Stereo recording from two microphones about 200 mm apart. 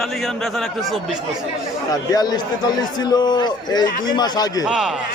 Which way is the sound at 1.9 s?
20° left (ahead or behind).